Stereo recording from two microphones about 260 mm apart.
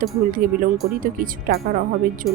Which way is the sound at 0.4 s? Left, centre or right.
Right.